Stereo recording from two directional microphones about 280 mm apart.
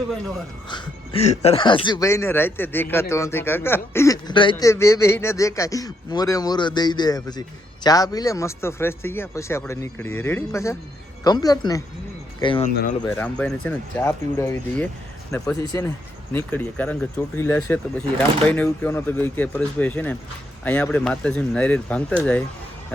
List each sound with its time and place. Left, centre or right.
0.7 s speech: centre
12.7 s speech: left
13.1 s speech: centre